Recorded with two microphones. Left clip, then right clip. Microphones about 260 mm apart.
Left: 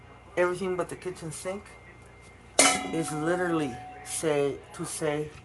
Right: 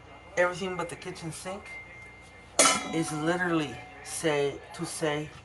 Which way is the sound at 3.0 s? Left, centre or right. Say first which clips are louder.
Left 1 dB; left.